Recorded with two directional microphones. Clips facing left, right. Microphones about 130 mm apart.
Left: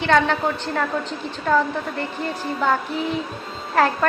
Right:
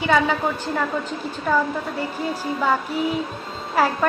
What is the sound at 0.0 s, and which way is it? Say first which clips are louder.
Speech: left 1 dB; 5° right (ahead or behind).